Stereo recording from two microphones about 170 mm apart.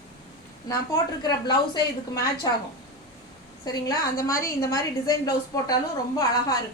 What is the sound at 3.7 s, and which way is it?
A woman's voice, 20° left (ahead or behind).